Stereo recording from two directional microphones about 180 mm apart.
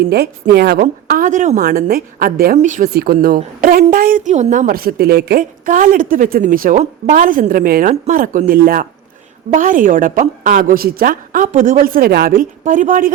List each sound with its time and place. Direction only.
0.0 s a woman's voice: 60° right (ahead or behind)
0.8 s a woman's voice: 50° right (ahead or behind)
1.6 s a woman's voice: 55° right (ahead or behind)
2.6 s a woman's voice: 45° right (ahead or behind)
2.9 s a woman's voice: 60° right (ahead or behind)